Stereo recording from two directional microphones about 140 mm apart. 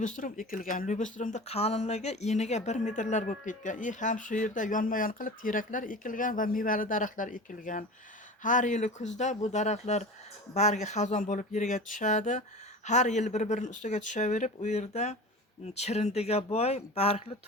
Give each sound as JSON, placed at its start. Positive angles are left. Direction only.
{"t": 0.0, "sound": "speech", "side_deg": 70}